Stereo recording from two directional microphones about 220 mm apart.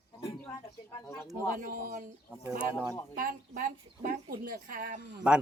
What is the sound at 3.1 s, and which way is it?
Speech, 40° right (ahead or behind).